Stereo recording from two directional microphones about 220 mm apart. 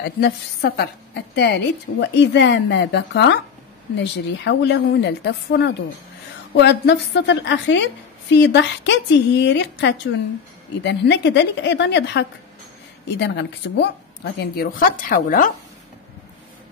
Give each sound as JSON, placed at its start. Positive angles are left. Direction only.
{"t": 0.0, "sound": "a woman's voice", "side_deg": 50}